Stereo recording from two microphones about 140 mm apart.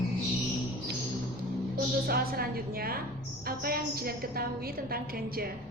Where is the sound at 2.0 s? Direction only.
90° right.